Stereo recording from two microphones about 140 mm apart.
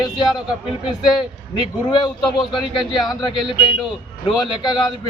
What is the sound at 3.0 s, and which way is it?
A man's voice, 30° left (ahead or behind).